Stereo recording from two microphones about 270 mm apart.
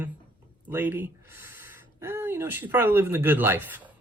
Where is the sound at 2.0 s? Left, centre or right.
Centre.